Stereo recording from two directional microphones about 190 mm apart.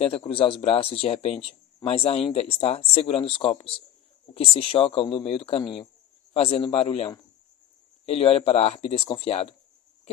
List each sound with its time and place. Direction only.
0.0 s speech: 30° left (ahead or behind)